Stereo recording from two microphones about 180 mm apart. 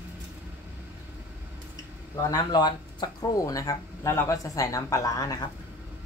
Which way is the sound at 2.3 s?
25° left (ahead or behind).